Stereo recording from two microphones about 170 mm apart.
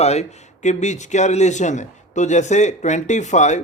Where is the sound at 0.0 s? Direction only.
40° left (ahead or behind).